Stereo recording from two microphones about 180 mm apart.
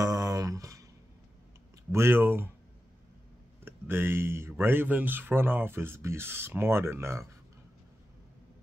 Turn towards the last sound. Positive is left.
turn(degrees=-15)  # may be behind; listen again after turning